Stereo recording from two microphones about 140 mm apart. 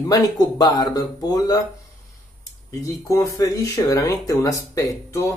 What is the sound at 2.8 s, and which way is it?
Speech, 20° left (ahead or behind).